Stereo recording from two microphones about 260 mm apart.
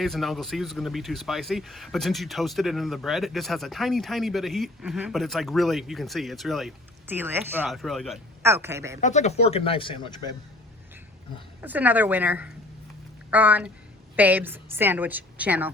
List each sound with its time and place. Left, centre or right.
0.0 s a woman's voice: centre
9.0 s speech: left
11.6 s a woman's voice: centre